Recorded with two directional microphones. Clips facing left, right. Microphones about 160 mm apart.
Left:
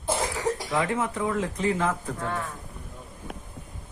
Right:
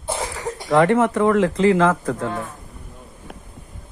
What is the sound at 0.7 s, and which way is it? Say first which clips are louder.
Speech: right 11 dB; 75° right (ahead or behind).